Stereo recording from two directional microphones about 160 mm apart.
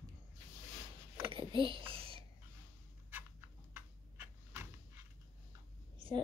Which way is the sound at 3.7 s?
15° right (ahead or behind).